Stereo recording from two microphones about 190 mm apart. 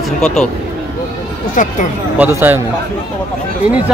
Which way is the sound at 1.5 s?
45° left (ahead or behind).